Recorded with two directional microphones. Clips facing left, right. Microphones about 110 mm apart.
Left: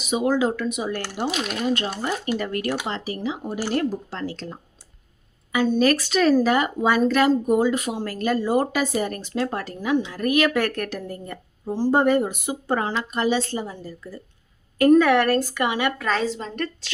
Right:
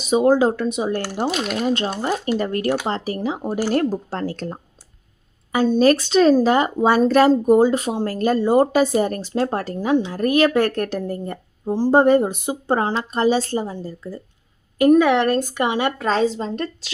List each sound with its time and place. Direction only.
0.0 s a woman's voice: 35° right (ahead or behind)
2.0 s speech: 35° right (ahead or behind)
5.5 s speech: 35° right (ahead or behind)
14.8 s a woman's voice: 15° right (ahead or behind)